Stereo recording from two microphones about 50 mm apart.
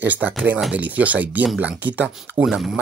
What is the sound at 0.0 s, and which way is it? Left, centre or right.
Speech, right.